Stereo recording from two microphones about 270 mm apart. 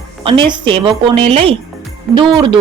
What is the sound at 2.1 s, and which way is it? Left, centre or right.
Speech, centre.